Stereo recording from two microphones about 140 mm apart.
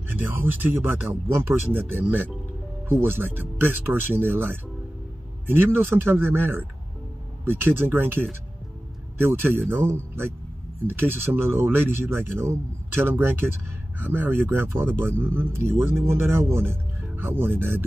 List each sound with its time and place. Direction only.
0.1 s speech: 15° right (ahead or behind)
7.6 s speech: 15° right (ahead or behind)